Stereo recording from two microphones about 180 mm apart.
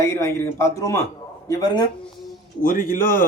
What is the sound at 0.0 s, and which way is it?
Speech, 15° left (ahead or behind).